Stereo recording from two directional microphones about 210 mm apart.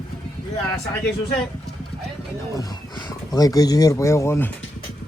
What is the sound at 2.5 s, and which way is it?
Speech, 20° left (ahead or behind).